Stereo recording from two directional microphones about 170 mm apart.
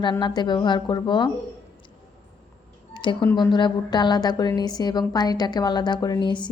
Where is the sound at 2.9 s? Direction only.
30° left (ahead or behind).